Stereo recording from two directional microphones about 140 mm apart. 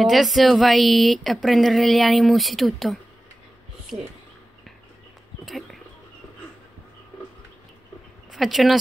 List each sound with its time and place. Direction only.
0.0 s speech: centre (ahead or behind)
5.4 s a sound: centre (ahead or behind)
8.3 s speech: centre (ahead or behind)